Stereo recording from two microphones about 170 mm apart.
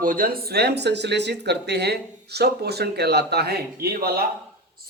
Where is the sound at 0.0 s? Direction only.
55° right (ahead or behind).